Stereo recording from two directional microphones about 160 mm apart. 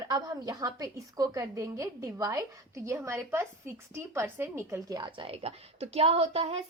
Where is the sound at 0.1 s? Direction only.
20° right (ahead or behind).